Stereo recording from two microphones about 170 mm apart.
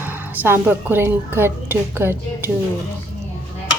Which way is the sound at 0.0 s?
10° right (ahead or behind).